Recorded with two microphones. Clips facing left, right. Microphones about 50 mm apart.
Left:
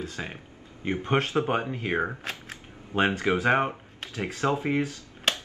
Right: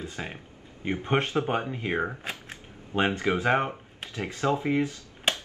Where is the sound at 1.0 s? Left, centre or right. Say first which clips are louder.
Even; centre.